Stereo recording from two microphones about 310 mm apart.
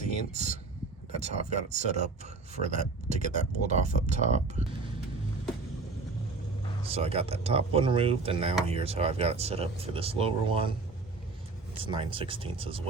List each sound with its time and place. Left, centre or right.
0.0 s speech: right
6.9 s speech: centre
11.8 s speech: centre